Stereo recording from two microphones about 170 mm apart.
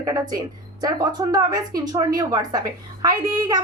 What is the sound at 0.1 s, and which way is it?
A woman's voice, 20° right (ahead or behind).